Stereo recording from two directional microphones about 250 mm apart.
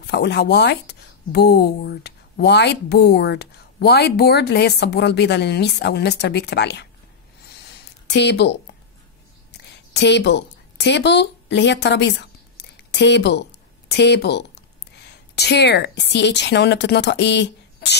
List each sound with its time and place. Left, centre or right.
0.0 s speech: left
8.1 s a woman's voice: left
9.9 s a woman's voice: left